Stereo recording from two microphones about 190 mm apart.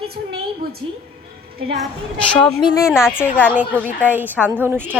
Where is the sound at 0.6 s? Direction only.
55° right (ahead or behind).